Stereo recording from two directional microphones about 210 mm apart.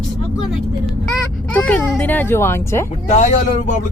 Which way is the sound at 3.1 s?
30° left (ahead or behind).